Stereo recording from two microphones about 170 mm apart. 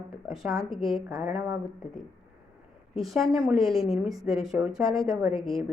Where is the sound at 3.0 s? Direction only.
Centre (ahead or behind).